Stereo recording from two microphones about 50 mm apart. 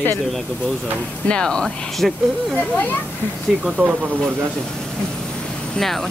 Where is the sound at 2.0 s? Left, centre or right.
Centre.